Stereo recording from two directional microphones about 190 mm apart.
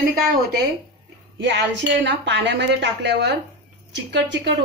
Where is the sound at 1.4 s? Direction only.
70° right (ahead or behind).